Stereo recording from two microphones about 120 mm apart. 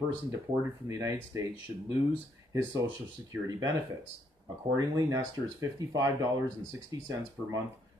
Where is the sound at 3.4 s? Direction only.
30° right (ahead or behind).